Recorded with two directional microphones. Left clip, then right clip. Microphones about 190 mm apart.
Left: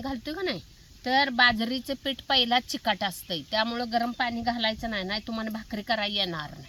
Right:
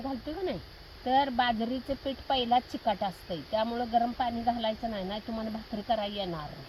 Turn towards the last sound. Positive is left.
turn(degrees=10)  # may be behind; listen again after turning